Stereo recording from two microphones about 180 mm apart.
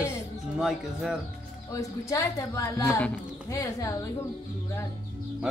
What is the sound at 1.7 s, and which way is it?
Speech, 20° left (ahead or behind).